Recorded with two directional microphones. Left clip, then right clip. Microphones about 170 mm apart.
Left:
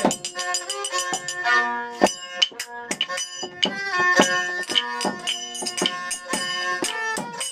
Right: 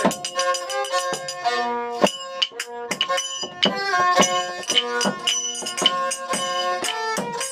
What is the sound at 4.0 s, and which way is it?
Music, 25° right (ahead or behind).